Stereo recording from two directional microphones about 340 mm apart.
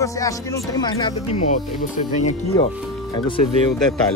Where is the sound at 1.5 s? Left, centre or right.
Left.